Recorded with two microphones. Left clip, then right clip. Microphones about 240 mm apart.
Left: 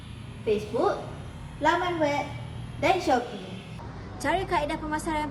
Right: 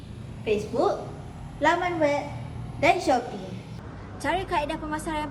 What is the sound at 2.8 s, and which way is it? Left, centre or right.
Speech, centre.